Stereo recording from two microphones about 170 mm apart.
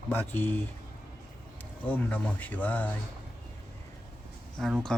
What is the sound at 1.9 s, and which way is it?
Speech, 10° left (ahead or behind).